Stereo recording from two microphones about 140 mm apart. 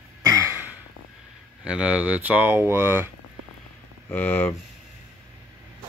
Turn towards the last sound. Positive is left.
turn(degrees=10)  # may be behind; listen again after turning